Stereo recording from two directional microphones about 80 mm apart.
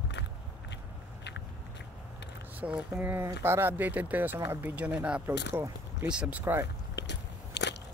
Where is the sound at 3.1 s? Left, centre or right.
Right.